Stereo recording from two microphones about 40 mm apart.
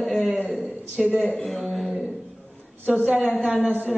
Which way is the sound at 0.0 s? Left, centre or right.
Centre.